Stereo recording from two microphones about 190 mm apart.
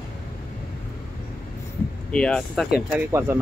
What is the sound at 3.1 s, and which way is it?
Speech, 15° right (ahead or behind).